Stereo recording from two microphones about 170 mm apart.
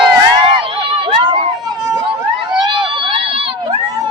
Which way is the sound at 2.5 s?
25° right (ahead or behind).